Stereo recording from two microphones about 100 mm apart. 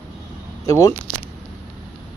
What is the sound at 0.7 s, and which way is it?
Speech, 35° left (ahead or behind).